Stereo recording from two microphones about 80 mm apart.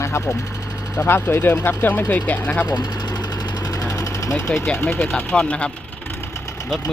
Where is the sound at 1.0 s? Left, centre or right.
Left.